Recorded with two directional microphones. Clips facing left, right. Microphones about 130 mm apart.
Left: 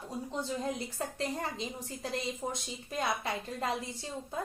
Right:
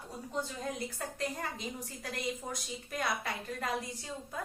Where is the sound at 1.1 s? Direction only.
25° left (ahead or behind).